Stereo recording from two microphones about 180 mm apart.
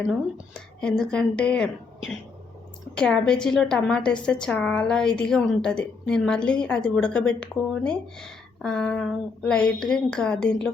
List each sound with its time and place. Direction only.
0.8 s a woman's voice: 5° left (ahead or behind)
2.9 s a woman's voice: 5° left (ahead or behind)